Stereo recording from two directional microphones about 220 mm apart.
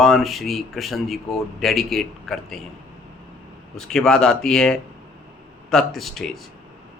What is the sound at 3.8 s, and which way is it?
Speech, centre (ahead or behind).